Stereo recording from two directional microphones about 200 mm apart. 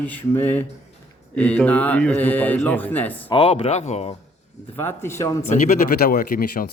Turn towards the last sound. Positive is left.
turn(degrees=45)  # may be behind; listen again after turning